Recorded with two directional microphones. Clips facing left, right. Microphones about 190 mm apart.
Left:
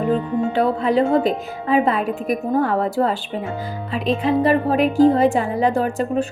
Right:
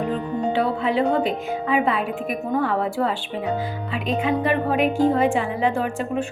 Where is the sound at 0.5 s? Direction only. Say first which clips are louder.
Left 4 dB; 40° left (ahead or behind).